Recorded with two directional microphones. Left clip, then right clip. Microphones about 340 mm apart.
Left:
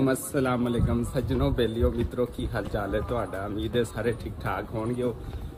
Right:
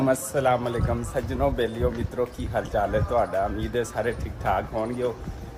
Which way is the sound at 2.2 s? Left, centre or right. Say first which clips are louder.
Right 2 dB; centre.